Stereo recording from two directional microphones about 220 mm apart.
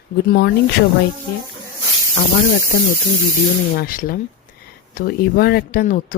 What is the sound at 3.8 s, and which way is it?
Speech, 40° left (ahead or behind).